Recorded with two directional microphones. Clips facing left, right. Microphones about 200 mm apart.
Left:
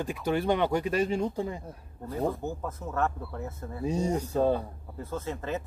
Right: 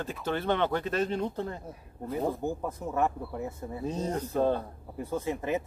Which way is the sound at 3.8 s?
10° left (ahead or behind).